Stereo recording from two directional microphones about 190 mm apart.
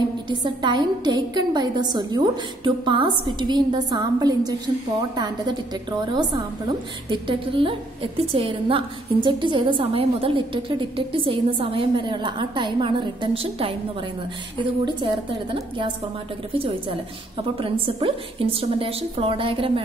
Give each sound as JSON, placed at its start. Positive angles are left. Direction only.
{"t": 0.3, "sound": "a woman's voice", "side_deg": -25}